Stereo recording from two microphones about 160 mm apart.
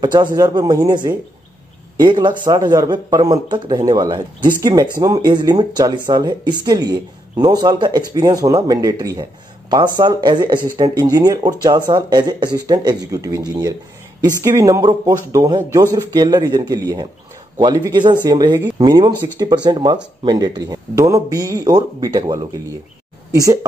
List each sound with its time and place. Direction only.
0.0 s speech: 25° right (ahead or behind)